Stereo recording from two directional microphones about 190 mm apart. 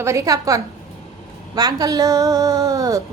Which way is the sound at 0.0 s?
15° right (ahead or behind).